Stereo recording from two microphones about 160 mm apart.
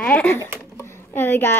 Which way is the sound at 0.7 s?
15° left (ahead or behind).